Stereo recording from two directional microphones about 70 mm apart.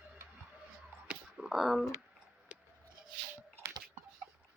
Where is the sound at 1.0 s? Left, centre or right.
Centre.